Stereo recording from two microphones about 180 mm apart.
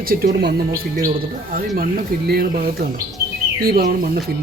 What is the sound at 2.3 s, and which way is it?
Speech, 55° right (ahead or behind).